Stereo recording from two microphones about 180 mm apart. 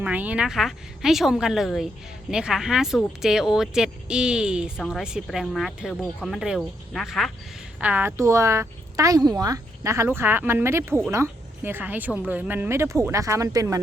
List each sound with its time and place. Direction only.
0.0 s a woman's voice: 10° right (ahead or behind)